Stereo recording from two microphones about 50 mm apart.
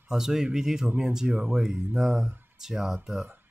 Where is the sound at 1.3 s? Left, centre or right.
Right.